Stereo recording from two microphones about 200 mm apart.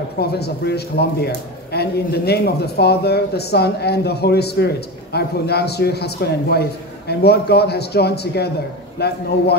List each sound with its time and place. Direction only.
0.2 s a man's voice: 55° left (ahead or behind)